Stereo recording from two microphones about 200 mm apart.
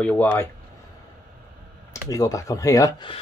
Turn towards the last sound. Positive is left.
turn(degrees=15)  # may be behind; listen again after turning